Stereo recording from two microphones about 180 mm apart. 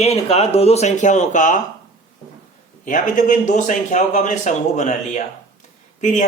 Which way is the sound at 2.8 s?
45° left (ahead or behind).